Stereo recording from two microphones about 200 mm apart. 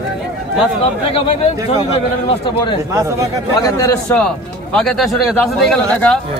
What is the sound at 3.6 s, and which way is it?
Speech, 15° left (ahead or behind).